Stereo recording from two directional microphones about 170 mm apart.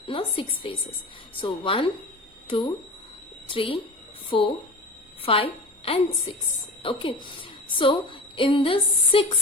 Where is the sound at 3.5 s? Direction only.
30° left (ahead or behind).